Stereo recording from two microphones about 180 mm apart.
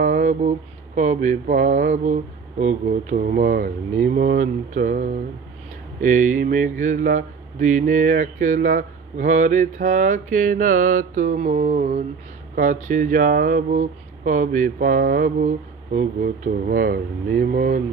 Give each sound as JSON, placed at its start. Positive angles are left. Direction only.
{"t": 0.0, "sound": "mantra", "side_deg": -45}
{"t": 2.6, "sound": "speech", "side_deg": -45}